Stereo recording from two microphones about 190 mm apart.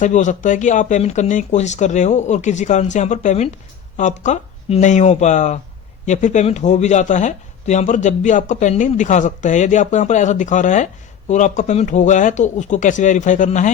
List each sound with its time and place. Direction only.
0.0 s speech: 40° left (ahead or behind)